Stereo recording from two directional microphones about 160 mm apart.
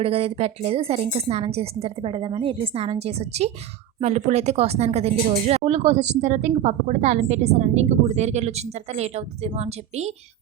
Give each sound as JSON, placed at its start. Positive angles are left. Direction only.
{"t": 0.0, "sound": "a woman's voice", "side_deg": -40}